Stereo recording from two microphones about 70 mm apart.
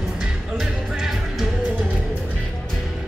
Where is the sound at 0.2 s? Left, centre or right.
Centre.